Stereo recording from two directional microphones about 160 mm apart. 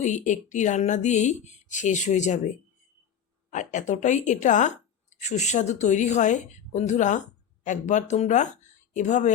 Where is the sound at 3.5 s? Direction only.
50° left (ahead or behind).